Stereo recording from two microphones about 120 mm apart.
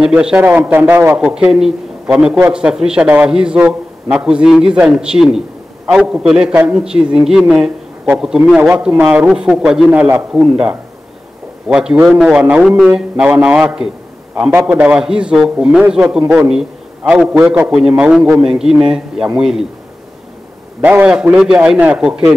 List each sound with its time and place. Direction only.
0.0 s a man's voice: 5° right (ahead or behind)
0.5 s a man's voice: 20° right (ahead or behind)
20.8 s a man's voice: 10° right (ahead or behind)